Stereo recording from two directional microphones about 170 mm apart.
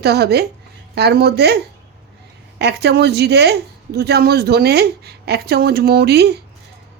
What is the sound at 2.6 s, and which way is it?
Speech, 80° right.